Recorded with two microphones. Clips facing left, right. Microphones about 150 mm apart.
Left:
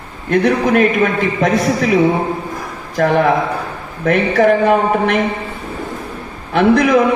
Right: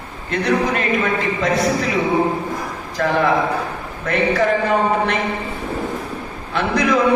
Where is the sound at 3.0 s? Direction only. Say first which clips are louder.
Left 6 dB; 50° left (ahead or behind).